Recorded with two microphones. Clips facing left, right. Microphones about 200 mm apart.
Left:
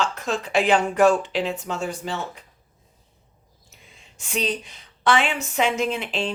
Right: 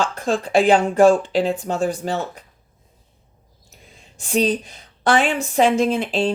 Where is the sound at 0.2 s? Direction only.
30° right (ahead or behind).